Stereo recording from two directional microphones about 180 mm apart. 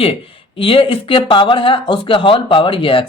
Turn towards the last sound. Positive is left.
turn(degrees=30)  # may be behind; listen again after turning